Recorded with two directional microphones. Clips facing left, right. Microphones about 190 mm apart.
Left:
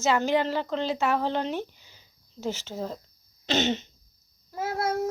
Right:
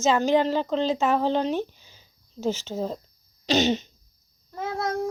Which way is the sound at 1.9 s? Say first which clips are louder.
Right 2 dB; 15° right (ahead or behind).